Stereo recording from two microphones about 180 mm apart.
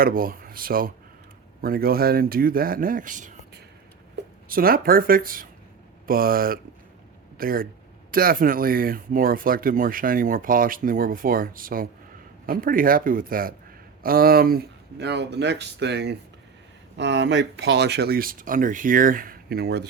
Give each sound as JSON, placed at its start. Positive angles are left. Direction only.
{"t": 0.0, "sound": "speech", "side_deg": -55}
{"t": 4.4, "sound": "speech", "side_deg": -55}